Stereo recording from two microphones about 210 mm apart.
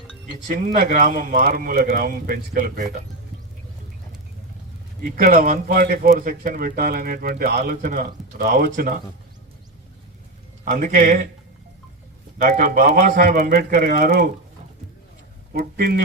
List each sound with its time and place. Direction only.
0.4 s speech: 40° right (ahead or behind)
5.0 s speech: 40° right (ahead or behind)
10.7 s speech: 40° right (ahead or behind)
12.4 s a man's voice: 40° right (ahead or behind)
15.5 s a man's voice: 50° right (ahead or behind)